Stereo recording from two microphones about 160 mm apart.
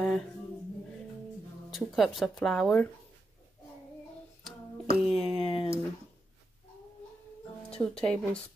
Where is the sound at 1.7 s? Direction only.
Centre (ahead or behind).